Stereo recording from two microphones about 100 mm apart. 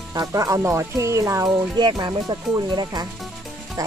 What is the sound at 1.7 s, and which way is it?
Speech, 45° right (ahead or behind).